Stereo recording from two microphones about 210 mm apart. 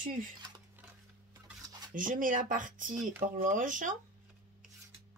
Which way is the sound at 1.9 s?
40° right (ahead or behind).